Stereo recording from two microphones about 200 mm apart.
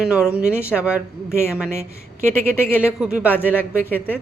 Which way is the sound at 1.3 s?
10° left (ahead or behind).